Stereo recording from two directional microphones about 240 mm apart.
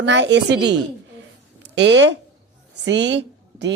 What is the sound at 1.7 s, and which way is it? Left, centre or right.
A woman's voice, right.